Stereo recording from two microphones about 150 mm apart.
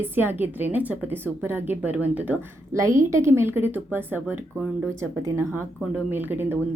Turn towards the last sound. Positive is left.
turn(degrees=-15)  # may be behind; listen again after turning